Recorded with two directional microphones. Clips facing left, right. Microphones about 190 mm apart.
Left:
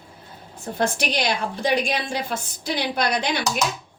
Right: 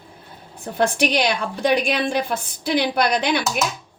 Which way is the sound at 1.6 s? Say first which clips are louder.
Right 5 dB; 60° right (ahead or behind).